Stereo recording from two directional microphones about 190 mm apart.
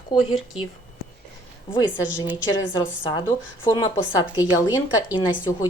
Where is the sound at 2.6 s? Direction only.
25° left (ahead or behind).